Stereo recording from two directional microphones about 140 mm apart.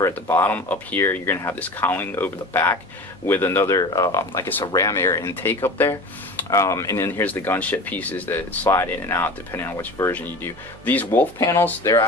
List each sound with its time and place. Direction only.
0.0 s speech: 15° left (ahead or behind)